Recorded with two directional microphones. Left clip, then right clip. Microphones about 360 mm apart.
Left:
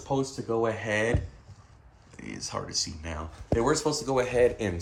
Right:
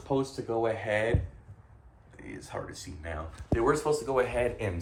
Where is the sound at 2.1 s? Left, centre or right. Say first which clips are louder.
Left 5 dB; left.